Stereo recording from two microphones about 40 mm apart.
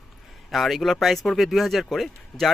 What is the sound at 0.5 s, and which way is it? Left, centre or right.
Speech, centre.